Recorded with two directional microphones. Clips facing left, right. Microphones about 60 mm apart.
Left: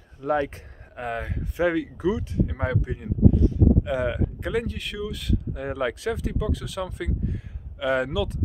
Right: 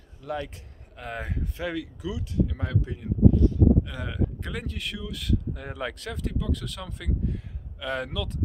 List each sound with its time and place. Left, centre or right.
0.2 s speech: left
1.1 s speech: centre
1.6 s speech: left
4.5 s speech: centre